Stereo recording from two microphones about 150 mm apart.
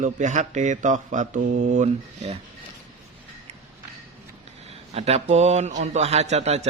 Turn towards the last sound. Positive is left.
turn(degrees=-45)  # may be behind; listen again after turning